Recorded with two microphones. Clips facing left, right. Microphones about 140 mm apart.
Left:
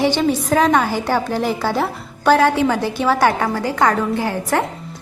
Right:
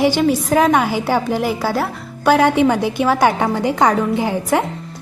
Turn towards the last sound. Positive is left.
turn(degrees=-15)  # may be behind; listen again after turning